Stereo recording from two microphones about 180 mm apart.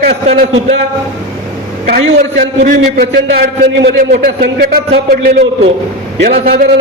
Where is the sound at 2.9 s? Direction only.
55° right (ahead or behind).